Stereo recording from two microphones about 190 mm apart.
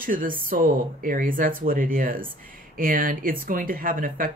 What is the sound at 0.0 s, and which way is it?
Speech, 45° right (ahead or behind).